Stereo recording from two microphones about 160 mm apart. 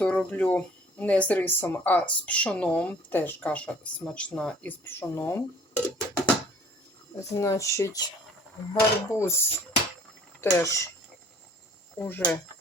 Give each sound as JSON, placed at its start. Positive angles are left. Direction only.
{"t": 0.0, "sound": "speech", "side_deg": 5}
{"t": 10.4, "sound": "speech", "side_deg": 20}
{"t": 11.9, "sound": "speech", "side_deg": 10}